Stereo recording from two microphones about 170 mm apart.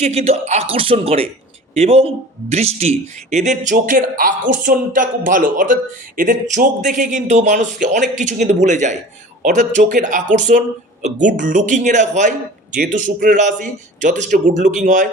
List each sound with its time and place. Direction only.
0.0 s speech: 40° right (ahead or behind)